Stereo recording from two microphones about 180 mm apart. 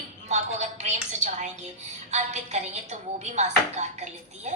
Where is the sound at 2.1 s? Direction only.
40° right (ahead or behind).